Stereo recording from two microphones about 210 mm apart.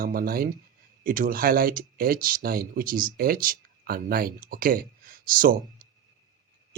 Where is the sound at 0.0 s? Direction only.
45° right (ahead or behind).